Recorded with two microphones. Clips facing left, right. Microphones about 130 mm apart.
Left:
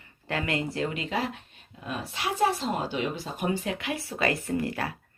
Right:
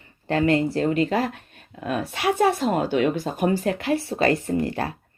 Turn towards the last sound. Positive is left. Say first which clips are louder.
# right 5 dB
turn(degrees=-30)  # may be behind; listen again after turning